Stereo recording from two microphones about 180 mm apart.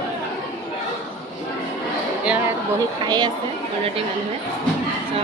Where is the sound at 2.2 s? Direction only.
10° right (ahead or behind).